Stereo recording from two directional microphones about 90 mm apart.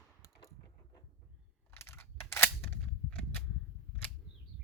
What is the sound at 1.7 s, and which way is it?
Cap gun, 30° left (ahead or behind).